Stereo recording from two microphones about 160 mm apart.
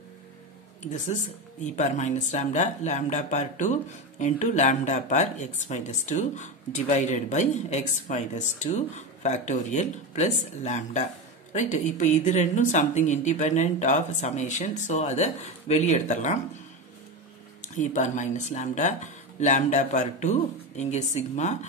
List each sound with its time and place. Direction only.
0.9 s speech: 50° left (ahead or behind)
17.7 s speech: 50° left (ahead or behind)